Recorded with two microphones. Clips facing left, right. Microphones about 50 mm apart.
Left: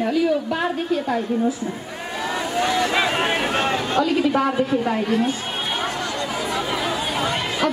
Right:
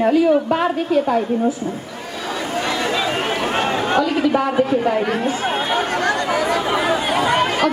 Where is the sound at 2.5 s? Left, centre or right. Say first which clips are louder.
Left 2 dB; right.